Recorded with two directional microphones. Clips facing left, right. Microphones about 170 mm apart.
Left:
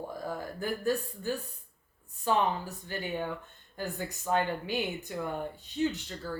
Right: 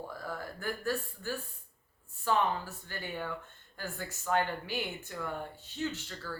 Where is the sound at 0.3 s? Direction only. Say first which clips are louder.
Left 3 dB; 15° left (ahead or behind).